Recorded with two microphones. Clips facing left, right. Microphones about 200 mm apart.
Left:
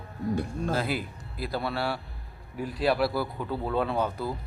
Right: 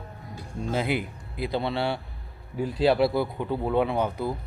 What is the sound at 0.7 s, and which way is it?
Speech, 20° right (ahead or behind).